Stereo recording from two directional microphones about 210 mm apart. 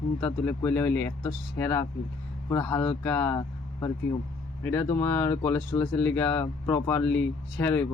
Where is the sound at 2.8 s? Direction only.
5° left (ahead or behind).